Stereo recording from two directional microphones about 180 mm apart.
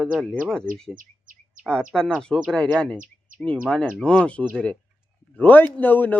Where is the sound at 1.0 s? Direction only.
50° right (ahead or behind).